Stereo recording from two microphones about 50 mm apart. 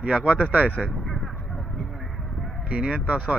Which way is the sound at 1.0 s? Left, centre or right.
Centre.